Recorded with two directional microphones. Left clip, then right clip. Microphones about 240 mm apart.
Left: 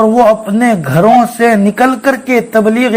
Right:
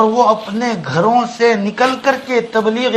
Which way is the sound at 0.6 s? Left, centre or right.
Left.